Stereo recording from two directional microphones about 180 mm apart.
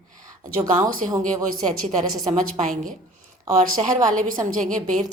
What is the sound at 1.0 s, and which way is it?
Speech, 40° right (ahead or behind).